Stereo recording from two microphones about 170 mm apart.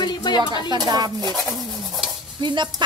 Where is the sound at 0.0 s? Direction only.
25° left (ahead or behind).